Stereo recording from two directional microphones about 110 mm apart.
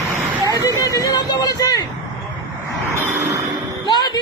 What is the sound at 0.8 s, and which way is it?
Speech, 30° left (ahead or behind).